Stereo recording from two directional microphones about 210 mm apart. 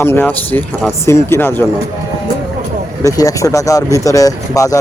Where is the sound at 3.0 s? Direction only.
15° left (ahead or behind).